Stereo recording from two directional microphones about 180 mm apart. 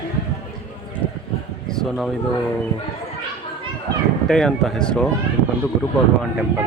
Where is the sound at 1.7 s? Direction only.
Centre (ahead or behind).